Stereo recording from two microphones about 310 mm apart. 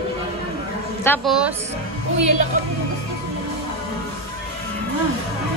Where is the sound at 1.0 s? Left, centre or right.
Centre.